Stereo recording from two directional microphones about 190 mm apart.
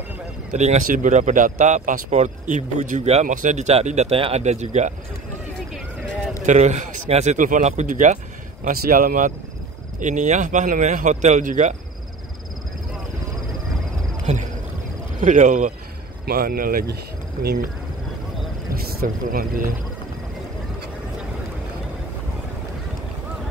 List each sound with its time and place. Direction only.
0.5 s speech: 40° right (ahead or behind)
6.4 s speech: 40° right (ahead or behind)
14.2 s cricket: 40° right (ahead or behind)
15.1 s speech: 40° right (ahead or behind)
16.3 s speech: 50° right (ahead or behind)
18.9 s speech: 50° right (ahead or behind)